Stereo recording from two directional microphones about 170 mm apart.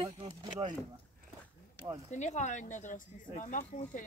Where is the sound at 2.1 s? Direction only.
45° left (ahead or behind).